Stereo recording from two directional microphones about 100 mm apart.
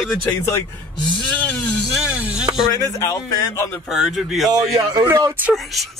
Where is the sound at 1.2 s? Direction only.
15° left (ahead or behind).